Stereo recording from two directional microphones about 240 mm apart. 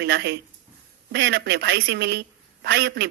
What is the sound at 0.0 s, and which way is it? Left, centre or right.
A woman's voice, right.